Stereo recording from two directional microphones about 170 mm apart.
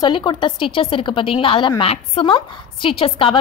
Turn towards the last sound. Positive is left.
turn(degrees=30)  # may be behind; listen again after turning